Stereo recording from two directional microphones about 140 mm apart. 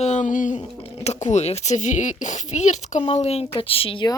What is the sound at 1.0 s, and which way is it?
Speech, 55° left (ahead or behind).